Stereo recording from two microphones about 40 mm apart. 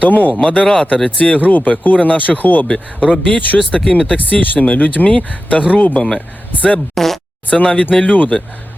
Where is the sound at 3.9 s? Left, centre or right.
Left.